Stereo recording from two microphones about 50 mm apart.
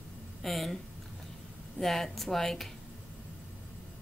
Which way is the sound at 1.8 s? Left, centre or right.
Centre.